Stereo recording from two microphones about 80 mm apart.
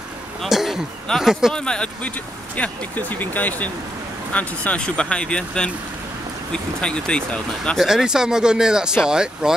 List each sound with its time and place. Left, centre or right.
0.4 s speech: centre
1.5 s speech: centre
7.8 s speech: centre